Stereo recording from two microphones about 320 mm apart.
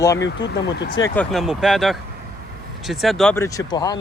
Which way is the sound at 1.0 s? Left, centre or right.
Centre.